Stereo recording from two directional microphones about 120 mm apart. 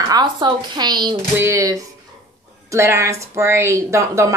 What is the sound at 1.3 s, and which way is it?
A woman's voice, 25° right (ahead or behind).